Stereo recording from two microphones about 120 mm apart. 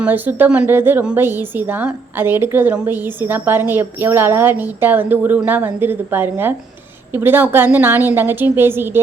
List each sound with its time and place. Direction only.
0.0 s a woman's voice: 15° right (ahead or behind)